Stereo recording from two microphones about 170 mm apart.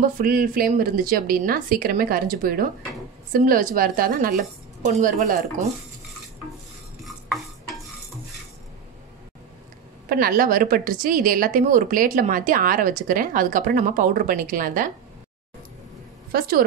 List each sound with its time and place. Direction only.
0.0 s a woman's voice: 55° right (ahead or behind)
7.0 s stir: centre (ahead or behind)
10.0 s a woman's voice: 55° right (ahead or behind)
16.3 s a woman's voice: 60° right (ahead or behind)